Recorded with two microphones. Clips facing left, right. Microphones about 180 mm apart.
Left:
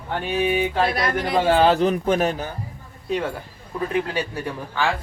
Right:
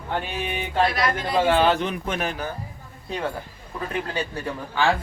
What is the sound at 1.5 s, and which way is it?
Speech, 30° left (ahead or behind).